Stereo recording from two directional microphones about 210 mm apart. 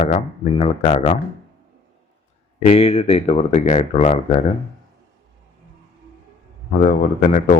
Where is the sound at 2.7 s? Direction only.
30° left (ahead or behind).